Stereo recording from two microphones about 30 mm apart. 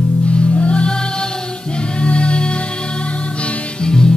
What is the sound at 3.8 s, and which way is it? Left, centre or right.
Music, left.